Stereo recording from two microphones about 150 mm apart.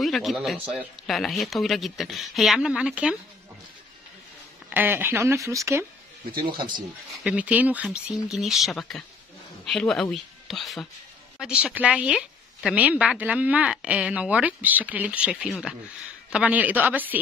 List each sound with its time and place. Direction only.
0.0 s a sound: centre (ahead or behind)
0.7 s speech: centre (ahead or behind)
4.6 s a woman's voice: 15° right (ahead or behind)
7.2 s a woman's voice: 10° right (ahead or behind)